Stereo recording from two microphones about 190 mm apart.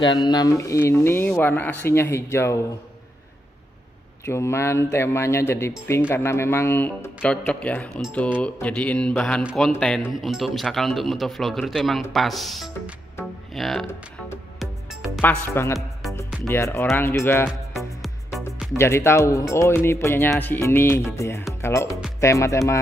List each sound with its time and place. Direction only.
0.1 s speech: 20° left (ahead or behind)
4.3 s speech: 15° left (ahead or behind)
9.4 s speech: 5° right (ahead or behind)
15.1 s speech: 10° left (ahead or behind)
17.5 s music: centre (ahead or behind)
18.8 s speech: 15° left (ahead or behind)